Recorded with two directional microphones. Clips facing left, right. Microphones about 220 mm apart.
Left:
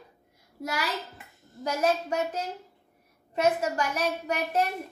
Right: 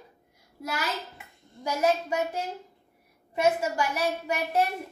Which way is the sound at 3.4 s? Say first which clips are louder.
Even; 10° right (ahead or behind).